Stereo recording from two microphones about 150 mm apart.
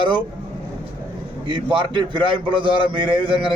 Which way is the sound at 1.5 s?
30° right (ahead or behind).